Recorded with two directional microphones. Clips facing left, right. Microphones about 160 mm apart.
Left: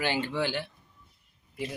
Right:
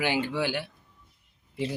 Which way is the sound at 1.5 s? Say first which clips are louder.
Right 5 dB; 30° right (ahead or behind).